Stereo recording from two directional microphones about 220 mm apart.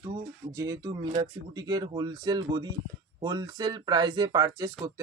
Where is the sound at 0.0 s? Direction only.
15° right (ahead or behind).